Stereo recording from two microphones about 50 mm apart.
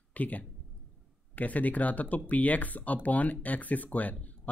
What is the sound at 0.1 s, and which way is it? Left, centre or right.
Speech, left.